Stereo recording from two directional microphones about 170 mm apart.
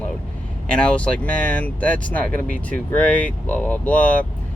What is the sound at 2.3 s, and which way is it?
Speech, 55° right (ahead or behind).